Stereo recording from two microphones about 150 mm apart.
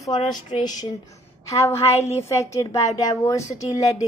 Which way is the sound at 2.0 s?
45° left (ahead or behind).